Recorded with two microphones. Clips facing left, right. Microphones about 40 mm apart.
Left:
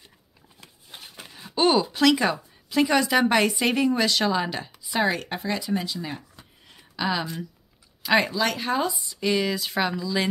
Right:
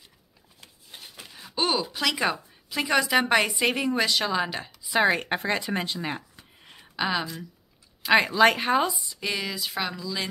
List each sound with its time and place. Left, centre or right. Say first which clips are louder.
0.9 s a sound: left 2 dB; left
1.3 s speech: left 6 dB; centre
5.0 s speech: right 2 dB; right
5.4 s speech: even; right
6.6 s a sound: even; right
8.0 s speech: right 1 dB; centre
8.3 s speech: right 5 dB; right
9.1 s speech: left 6 dB; centre